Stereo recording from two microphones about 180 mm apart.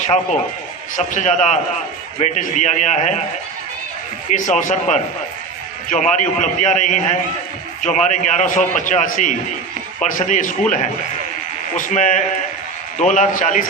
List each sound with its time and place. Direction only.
0.9 s a man's voice: 45° left (ahead or behind)
4.3 s a man's voice: 45° left (ahead or behind)